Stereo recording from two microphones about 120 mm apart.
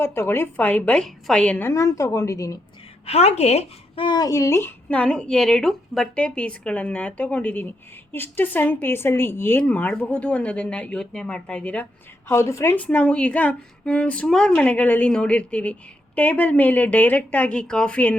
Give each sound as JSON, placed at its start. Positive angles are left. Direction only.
{"t": 0.0, "sound": "a woman's voice", "side_deg": 20}
{"t": 1.7, "sound": "a woman's voice", "side_deg": 25}
{"t": 3.1, "sound": "speech", "side_deg": 60}
{"t": 4.0, "sound": "a woman's voice", "side_deg": 35}
{"t": 12.3, "sound": "a woman's voice", "side_deg": 20}